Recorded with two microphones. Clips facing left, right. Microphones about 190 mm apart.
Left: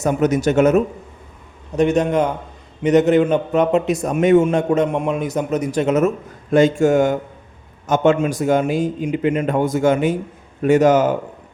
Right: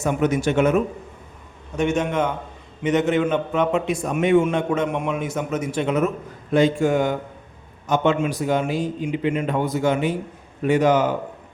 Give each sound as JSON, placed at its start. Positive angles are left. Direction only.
{"t": 0.0, "sound": "a man's voice", "side_deg": 40}